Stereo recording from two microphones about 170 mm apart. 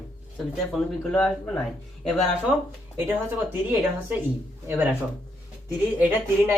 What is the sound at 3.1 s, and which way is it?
Speech, 10° right (ahead or behind).